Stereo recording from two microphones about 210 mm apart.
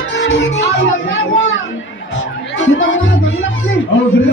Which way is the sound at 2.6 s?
60° left (ahead or behind).